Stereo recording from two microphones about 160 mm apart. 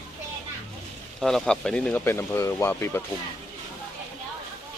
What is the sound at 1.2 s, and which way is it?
Speech, centre (ahead or behind).